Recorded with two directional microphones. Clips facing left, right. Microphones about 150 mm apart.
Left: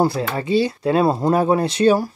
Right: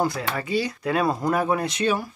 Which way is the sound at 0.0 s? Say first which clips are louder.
Left 6 dB; 30° left (ahead or behind).